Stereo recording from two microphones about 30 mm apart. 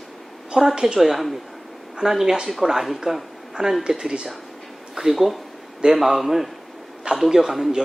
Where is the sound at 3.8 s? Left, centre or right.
Right.